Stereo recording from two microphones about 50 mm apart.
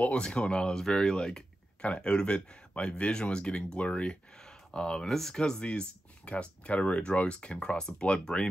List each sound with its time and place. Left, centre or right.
0.1 s speech: centre
0.7 s speech: centre
5.0 s speech: centre